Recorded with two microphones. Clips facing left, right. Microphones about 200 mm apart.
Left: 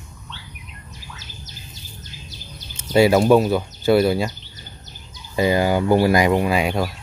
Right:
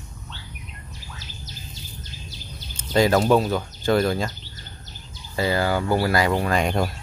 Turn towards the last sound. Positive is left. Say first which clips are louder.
# left 2 dB
turn(degrees=5)  # may be behind; listen again after turning